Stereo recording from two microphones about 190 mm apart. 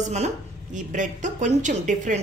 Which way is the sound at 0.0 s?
35° right (ahead or behind).